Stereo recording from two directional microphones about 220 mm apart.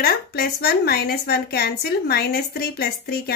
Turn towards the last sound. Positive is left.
turn(degrees=45)  # may be behind; listen again after turning